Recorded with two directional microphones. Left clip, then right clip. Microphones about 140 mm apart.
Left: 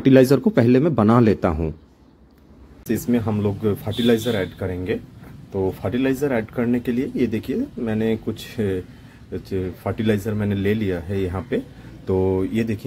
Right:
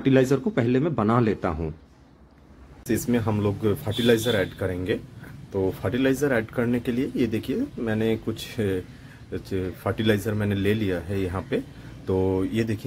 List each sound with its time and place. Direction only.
0.0 s a man's voice: 35° left (ahead or behind)
2.9 s speech: centre (ahead or behind)